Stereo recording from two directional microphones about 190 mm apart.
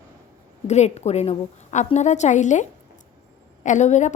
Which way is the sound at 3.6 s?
40° left (ahead or behind).